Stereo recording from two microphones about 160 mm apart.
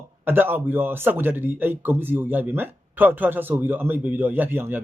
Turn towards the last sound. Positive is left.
turn(degrees=-15)  # may be behind; listen again after turning